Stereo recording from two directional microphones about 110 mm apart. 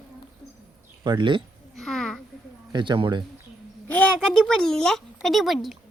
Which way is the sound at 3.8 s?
15° left (ahead or behind).